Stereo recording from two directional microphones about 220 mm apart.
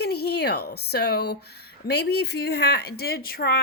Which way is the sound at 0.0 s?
45° left (ahead or behind).